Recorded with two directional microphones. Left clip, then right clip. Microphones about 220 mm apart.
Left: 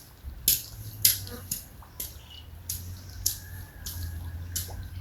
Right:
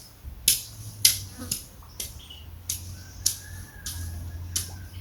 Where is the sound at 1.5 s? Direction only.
15° left (ahead or behind).